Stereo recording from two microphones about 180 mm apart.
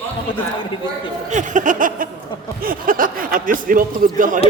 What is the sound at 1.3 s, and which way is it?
Speech, 45° right (ahead or behind).